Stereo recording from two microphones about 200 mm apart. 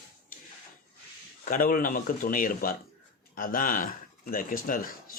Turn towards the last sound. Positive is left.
turn(degrees=45)  # may be behind; listen again after turning